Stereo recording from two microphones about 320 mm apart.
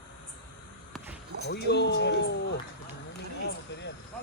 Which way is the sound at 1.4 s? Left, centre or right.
Left.